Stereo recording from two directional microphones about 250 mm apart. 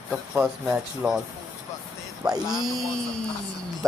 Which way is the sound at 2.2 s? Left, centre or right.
Centre.